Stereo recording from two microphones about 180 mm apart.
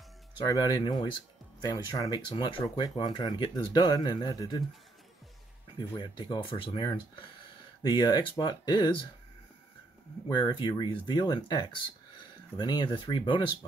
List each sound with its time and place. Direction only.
0.4 s speech: 20° left (ahead or behind)
5.8 s speech: 25° left (ahead or behind)
10.2 s speech: 25° left (ahead or behind)